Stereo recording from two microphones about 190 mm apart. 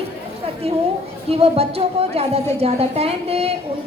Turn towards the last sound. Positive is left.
turn(degrees=-30)  # may be behind; listen again after turning